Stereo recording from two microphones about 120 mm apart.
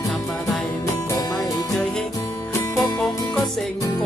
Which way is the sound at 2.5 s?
25° left (ahead or behind).